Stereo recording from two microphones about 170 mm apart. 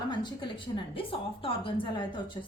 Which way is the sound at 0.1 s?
25° left (ahead or behind).